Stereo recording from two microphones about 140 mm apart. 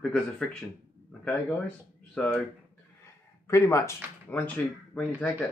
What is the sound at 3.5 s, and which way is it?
Speech, 20° left (ahead or behind).